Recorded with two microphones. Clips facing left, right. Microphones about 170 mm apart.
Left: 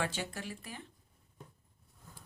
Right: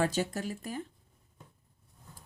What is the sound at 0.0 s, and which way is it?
Speech, 40° right (ahead or behind).